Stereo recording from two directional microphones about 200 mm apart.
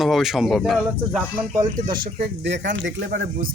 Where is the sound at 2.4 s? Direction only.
60° right (ahead or behind).